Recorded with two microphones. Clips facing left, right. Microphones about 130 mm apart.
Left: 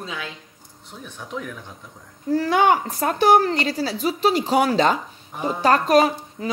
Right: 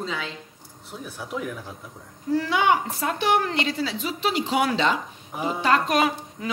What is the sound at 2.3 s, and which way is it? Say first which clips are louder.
A woman's voice: left 3 dB; 45° left (ahead or behind).